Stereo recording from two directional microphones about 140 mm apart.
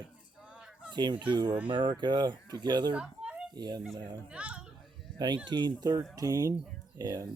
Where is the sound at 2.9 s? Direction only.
5° right (ahead or behind).